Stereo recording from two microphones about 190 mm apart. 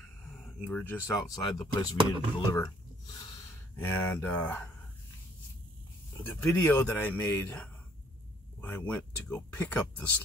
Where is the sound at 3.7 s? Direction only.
10° left (ahead or behind).